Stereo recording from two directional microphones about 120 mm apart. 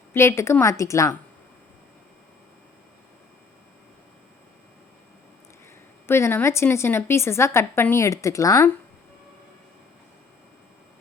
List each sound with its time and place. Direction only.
0.1 s a woman's voice: 20° left (ahead or behind)
6.1 s a woman's voice: 20° left (ahead or behind)